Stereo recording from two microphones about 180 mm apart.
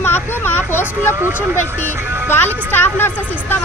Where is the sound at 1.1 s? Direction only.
15° right (ahead or behind).